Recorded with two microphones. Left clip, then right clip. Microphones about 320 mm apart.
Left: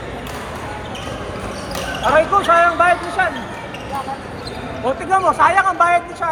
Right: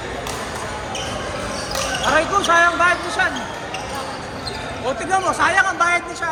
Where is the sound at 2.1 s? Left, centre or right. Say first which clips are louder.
Left 3 dB; centre.